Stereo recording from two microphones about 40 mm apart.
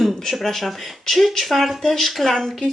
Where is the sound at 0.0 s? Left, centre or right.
Centre.